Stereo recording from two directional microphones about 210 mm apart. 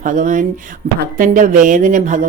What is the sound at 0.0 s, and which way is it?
Speech, 40° right (ahead or behind).